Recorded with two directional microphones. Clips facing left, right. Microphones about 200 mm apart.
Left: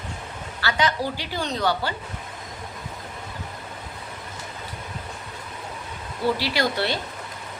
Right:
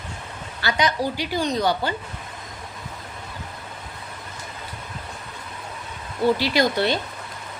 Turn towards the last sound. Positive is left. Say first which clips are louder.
# right 4 dB
turn(degrees=-20)  # may be behind; listen again after turning